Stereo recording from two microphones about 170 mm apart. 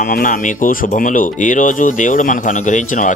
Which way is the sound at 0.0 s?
55° left (ahead or behind).